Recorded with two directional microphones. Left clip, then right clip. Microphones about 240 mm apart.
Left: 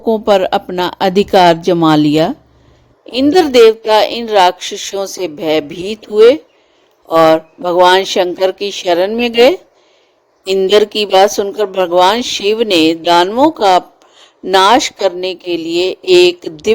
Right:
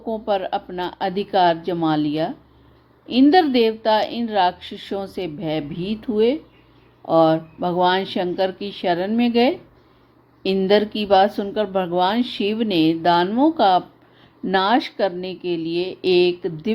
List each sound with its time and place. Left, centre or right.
0.0 s a woman's voice: left